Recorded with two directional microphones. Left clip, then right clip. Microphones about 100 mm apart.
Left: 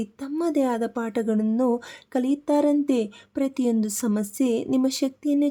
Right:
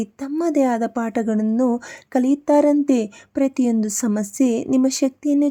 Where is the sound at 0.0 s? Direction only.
35° right (ahead or behind).